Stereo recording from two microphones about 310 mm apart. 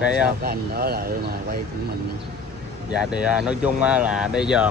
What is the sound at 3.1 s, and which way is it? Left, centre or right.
Speech, centre.